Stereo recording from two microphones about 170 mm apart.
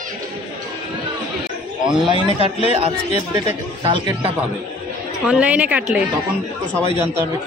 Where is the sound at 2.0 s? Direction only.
35° right (ahead or behind).